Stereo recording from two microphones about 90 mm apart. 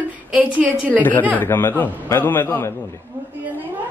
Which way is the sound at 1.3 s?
25° left (ahead or behind).